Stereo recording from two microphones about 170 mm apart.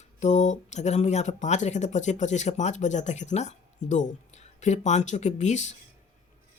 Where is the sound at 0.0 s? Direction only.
45° left (ahead or behind).